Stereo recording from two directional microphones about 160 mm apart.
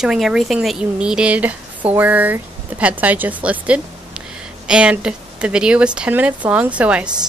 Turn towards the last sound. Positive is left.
turn(degrees=-10)  # may be behind; listen again after turning